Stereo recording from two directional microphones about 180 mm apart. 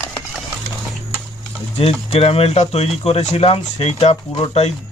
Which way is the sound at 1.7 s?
35° left (ahead or behind).